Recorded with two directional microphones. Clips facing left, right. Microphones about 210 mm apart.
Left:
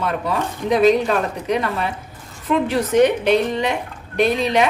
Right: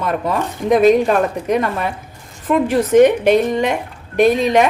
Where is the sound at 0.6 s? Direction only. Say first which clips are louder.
Right 3 dB; 50° right (ahead or behind).